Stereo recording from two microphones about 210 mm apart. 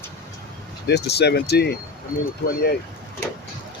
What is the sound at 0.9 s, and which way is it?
Speech, 55° left (ahead or behind).